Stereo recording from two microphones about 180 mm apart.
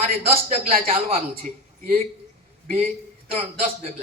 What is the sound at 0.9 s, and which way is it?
Speech, 35° right (ahead or behind).